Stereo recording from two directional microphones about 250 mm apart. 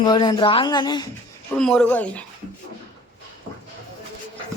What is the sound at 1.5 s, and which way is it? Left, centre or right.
Speech, centre.